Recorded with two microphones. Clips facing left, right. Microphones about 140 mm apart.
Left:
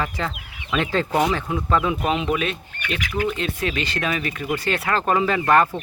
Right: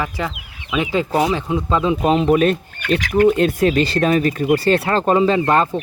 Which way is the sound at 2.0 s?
35° right (ahead or behind).